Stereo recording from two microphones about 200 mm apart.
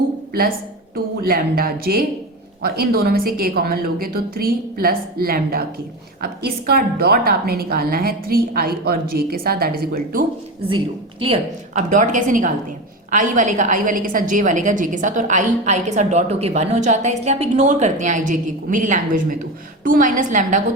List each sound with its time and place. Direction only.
1.2 s a woman's voice: 50° right (ahead or behind)
10.7 s a woman's voice: 25° right (ahead or behind)